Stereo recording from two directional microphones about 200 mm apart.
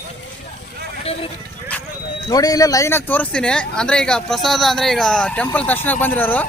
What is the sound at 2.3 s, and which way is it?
Speech, 20° left (ahead or behind).